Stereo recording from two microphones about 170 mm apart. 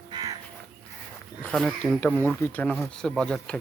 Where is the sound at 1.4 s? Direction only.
5° left (ahead or behind).